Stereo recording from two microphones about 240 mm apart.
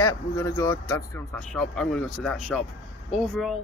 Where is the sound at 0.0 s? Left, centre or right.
Centre.